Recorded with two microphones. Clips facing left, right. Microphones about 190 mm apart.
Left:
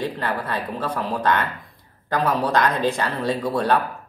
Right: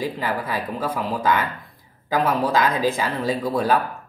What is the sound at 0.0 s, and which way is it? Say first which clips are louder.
Speech: even; 5° right (ahead or behind).